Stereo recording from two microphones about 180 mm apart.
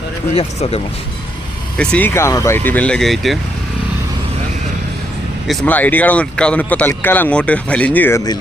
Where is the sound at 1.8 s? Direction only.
5° left (ahead or behind).